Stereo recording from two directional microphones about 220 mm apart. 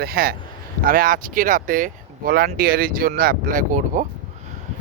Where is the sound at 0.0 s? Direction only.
45° right (ahead or behind).